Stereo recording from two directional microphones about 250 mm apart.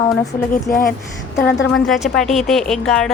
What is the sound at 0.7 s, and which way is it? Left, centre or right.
Speech, left.